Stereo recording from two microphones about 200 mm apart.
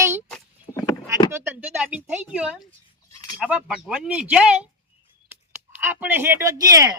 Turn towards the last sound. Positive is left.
turn(degrees=-15)  # may be behind; listen again after turning